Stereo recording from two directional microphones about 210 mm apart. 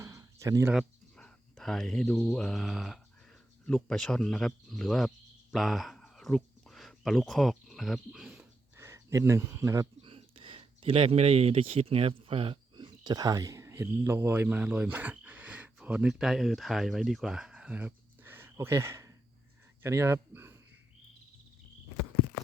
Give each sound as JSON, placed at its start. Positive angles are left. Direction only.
{"t": 0.0, "sound": "a sound", "side_deg": -15}
{"t": 0.7, "sound": "speech", "side_deg": 0}
{"t": 10.0, "sound": "speech", "side_deg": -25}